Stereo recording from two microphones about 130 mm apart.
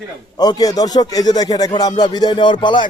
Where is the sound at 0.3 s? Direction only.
30° left (ahead or behind).